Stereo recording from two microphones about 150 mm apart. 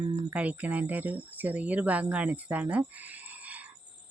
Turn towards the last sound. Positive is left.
turn(degrees=-10)  # may be behind; listen again after turning